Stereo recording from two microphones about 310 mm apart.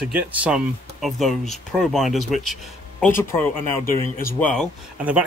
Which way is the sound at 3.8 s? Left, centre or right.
Left.